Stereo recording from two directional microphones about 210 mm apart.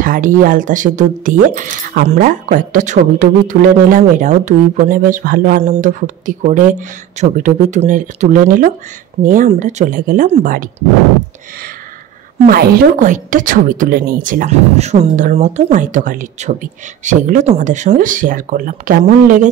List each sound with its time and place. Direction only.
0.0 s speech: 40° right (ahead or behind)
12.4 s speech: 45° right (ahead or behind)